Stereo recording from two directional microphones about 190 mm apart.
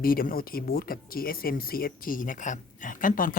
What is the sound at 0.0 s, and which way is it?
Speech, 50° left (ahead or behind).